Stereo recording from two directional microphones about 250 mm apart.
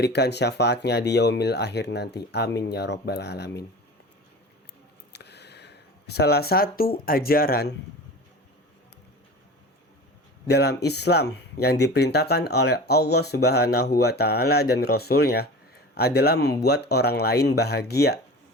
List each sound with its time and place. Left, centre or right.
0.0 s speech: left
5.1 s speech: left
10.4 s speech: left